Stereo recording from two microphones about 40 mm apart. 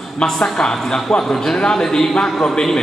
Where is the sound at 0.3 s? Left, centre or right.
Centre.